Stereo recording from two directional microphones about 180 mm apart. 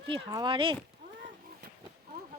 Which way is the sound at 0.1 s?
25° right (ahead or behind).